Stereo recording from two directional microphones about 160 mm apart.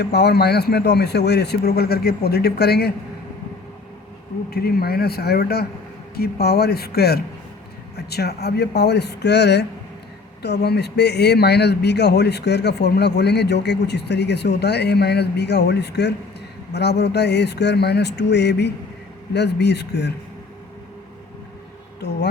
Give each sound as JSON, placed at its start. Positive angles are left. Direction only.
{"t": 0.0, "sound": "speech", "side_deg": 90}
{"t": 4.5, "sound": "a man's voice", "side_deg": 80}
{"t": 22.0, "sound": "speech", "side_deg": 90}